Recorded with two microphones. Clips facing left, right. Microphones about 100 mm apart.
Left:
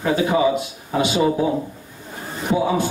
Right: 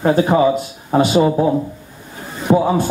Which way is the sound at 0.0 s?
40° right (ahead or behind).